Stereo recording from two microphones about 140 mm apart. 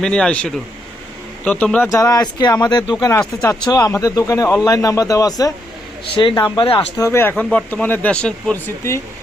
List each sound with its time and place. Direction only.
0.0 s a man's voice: 5° left (ahead or behind)
1.9 s speech: 25° left (ahead or behind); by 6.8 s 40° left (ahead or behind)
6.9 s speech: 20° left (ahead or behind)